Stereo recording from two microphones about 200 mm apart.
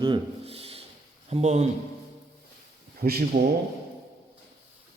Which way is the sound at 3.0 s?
50° right (ahead or behind).